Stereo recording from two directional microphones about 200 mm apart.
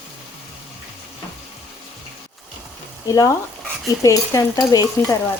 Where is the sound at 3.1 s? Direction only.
15° left (ahead or behind).